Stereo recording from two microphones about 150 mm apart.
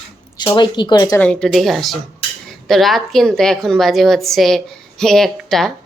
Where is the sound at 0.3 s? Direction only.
30° left (ahead or behind).